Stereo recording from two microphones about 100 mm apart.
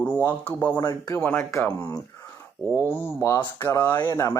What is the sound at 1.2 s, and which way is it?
Speech, 15° left (ahead or behind).